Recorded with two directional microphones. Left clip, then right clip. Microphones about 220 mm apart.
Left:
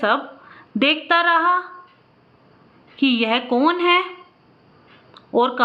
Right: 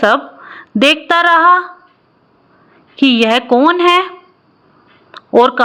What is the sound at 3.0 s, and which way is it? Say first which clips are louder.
A woman's voice: right 8 dB; 30° right (ahead or behind).